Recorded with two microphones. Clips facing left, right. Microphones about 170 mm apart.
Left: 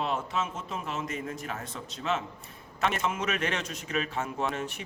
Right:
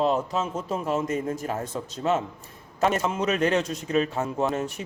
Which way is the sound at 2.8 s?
35° right (ahead or behind).